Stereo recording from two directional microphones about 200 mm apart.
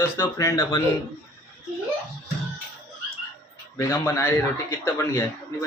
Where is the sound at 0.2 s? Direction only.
15° left (ahead or behind).